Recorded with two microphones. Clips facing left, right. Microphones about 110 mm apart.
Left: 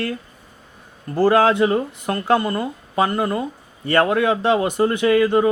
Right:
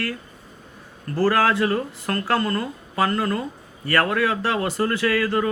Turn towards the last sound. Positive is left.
turn(degrees=20)  # may be behind; listen again after turning